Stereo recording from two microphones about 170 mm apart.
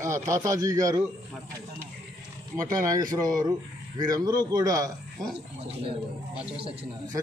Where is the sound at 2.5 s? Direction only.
20° right (ahead or behind).